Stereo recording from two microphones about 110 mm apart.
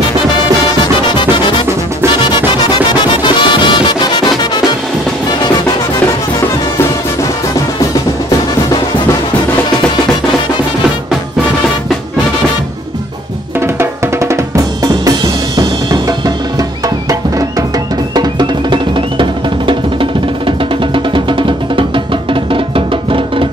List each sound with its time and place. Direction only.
2.9 s music: 45° left (ahead or behind)
13.6 s drum: 25° right (ahead or behind)
18.1 s music: 45° right (ahead or behind)